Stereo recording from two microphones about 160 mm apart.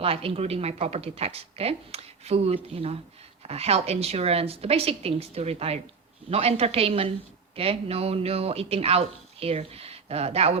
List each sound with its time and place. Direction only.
0.0 s speech: 35° right (ahead or behind)